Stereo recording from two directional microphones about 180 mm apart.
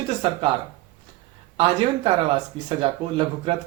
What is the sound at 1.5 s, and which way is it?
Speech, 30° right (ahead or behind).